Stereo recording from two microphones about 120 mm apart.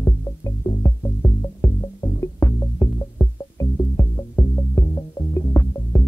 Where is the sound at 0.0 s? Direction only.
30° left (ahead or behind).